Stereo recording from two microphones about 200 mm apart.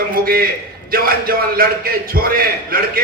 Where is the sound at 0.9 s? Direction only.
50° right (ahead or behind).